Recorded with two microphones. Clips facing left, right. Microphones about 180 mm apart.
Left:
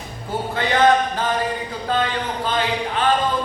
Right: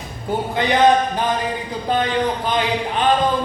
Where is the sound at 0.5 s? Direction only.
15° right (ahead or behind).